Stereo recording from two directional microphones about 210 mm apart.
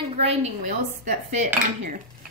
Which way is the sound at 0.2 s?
30° right (ahead or behind).